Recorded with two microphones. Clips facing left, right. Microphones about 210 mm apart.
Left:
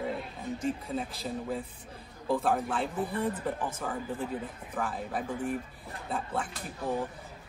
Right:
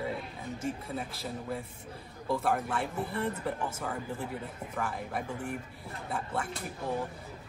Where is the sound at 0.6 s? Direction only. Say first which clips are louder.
Left 3 dB; 30° left (ahead or behind).